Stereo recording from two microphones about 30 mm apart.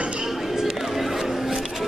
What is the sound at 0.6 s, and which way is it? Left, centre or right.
Chatter, centre.